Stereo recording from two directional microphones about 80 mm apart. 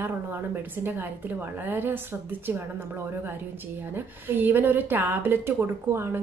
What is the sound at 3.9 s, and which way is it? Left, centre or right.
A woman's voice, right.